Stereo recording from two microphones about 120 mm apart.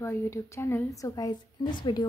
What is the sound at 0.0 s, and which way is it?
A woman's voice, 20° left (ahead or behind).